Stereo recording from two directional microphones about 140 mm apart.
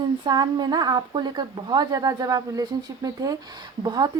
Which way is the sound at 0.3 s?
30° right (ahead or behind).